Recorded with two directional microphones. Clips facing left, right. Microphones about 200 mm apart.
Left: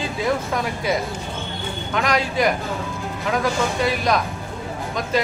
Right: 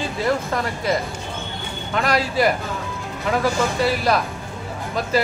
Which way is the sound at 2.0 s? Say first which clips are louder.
Right 1 dB; 5° right (ahead or behind).